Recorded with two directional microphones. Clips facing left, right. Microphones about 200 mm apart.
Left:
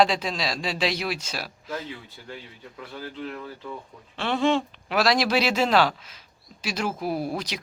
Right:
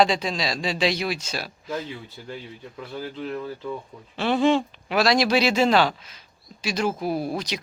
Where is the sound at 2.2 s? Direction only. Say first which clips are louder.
Right 4 dB; 25° right (ahead or behind).